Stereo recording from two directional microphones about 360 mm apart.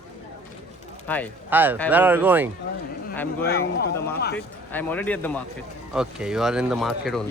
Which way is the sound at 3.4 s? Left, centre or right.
Left.